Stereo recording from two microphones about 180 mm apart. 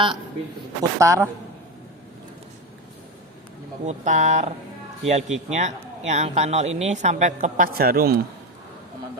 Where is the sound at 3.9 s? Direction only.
40° right (ahead or behind); by 8.1 s 55° right (ahead or behind).